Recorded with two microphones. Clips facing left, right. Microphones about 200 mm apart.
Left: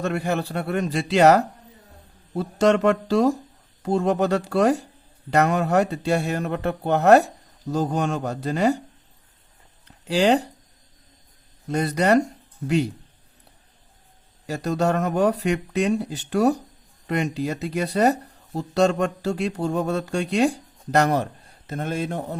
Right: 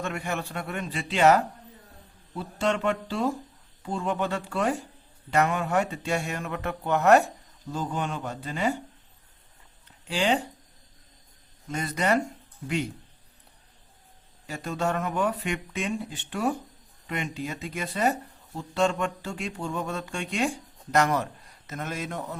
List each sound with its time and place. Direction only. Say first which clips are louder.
0.0 s speech: left 7 dB; 35° left (ahead or behind)
2.6 s speech: left 8 dB; 40° left (ahead or behind)
10.1 s speech: left 7 dB; 40° left (ahead or behind)
11.7 s speech: left 7 dB; 35° left (ahead or behind)
14.4 s speech: left 6 dB; 40° left (ahead or behind)